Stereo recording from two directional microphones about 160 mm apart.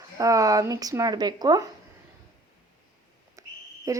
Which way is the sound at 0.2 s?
20° right (ahead or behind).